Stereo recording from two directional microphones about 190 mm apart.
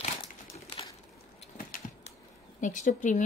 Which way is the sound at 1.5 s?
45° left (ahead or behind).